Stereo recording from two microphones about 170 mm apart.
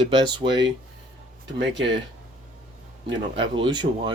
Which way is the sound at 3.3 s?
30° right (ahead or behind).